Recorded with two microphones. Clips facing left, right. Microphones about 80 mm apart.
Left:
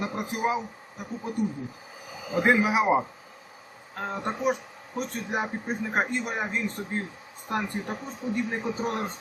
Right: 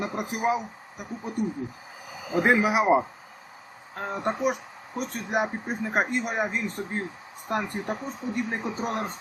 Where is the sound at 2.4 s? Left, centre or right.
Centre.